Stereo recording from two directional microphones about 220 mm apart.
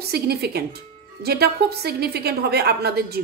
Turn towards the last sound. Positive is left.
turn(degrees=-45)  # may be behind; listen again after turning